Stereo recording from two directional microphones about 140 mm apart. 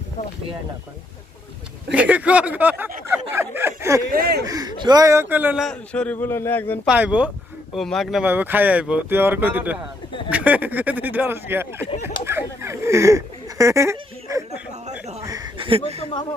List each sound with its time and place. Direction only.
1.9 s speech: 10° right (ahead or behind)
4.1 s speech: 90° right
4.4 s speech: 30° right (ahead or behind); by 5.5 s 15° right (ahead or behind)
5.5 s a man's voice: 5° left (ahead or behind)
6.8 s speech: 10° right (ahead or behind)
7.7 s speech: centre (ahead or behind)
8.2 s speech: 15° right (ahead or behind)
12.2 s a sound: 20° right (ahead or behind)
15.5 s a sound: 40° right (ahead or behind)